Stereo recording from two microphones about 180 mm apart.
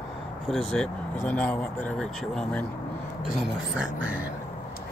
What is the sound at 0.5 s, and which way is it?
Speech, centre (ahead or behind).